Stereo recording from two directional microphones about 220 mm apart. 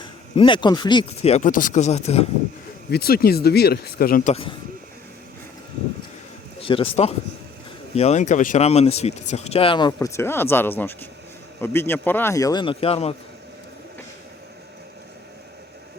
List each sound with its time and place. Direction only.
0.3 s speech: 20° left (ahead or behind)
2.9 s speech: 45° left (ahead or behind)
6.6 s a man's voice: 25° left (ahead or behind)